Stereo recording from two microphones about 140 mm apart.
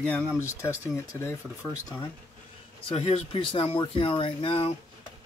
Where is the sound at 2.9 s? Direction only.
50° left (ahead or behind).